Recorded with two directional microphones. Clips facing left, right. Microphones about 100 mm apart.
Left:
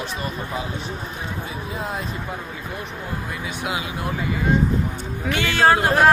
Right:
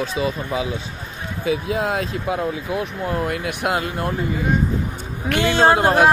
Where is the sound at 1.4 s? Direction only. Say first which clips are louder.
Right 13 dB; 90° right; by 4.1 s 55° right (ahead or behind).